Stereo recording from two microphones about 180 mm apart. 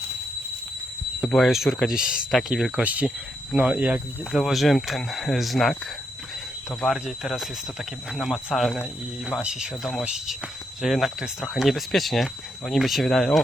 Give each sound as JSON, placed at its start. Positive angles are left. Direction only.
{"t": 1.2, "sound": "speech", "side_deg": 0}